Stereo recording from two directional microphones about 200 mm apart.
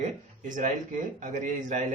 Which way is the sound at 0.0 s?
40° right (ahead or behind).